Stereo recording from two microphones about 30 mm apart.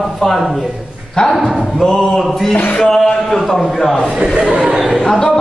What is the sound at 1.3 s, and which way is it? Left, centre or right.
A man's voice, centre.